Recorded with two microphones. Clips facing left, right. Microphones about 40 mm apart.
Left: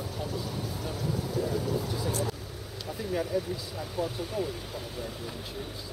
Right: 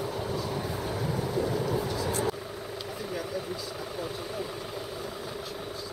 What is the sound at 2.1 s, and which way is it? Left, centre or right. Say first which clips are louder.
Vehicle: right 2 dB; right.